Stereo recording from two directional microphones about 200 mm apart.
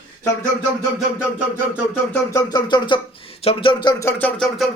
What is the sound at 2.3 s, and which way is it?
Speech, 20° left (ahead or behind).